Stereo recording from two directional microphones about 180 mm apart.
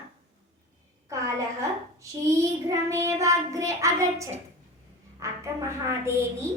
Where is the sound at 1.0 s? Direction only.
15° right (ahead or behind).